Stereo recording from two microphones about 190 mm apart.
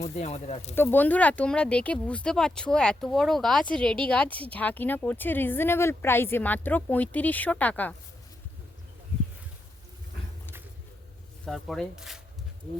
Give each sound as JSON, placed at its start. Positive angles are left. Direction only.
{"t": 0.0, "sound": "speech", "side_deg": 35}
{"t": 0.8, "sound": "speech", "side_deg": 10}
{"t": 11.4, "sound": "speech", "side_deg": 0}